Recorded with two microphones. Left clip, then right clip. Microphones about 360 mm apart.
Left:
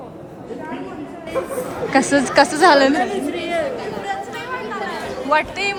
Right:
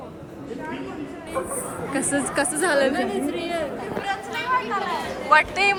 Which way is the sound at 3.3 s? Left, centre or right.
Centre.